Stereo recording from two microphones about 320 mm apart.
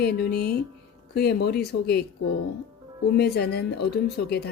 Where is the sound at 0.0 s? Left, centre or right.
Left.